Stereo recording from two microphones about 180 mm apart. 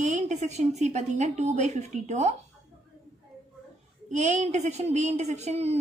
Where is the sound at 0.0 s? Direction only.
40° right (ahead or behind).